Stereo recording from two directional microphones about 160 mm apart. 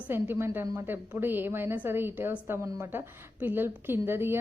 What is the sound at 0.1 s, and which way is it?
A woman's voice, 15° right (ahead or behind).